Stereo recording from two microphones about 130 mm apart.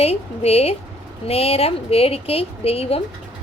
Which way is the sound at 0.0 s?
50° left (ahead or behind).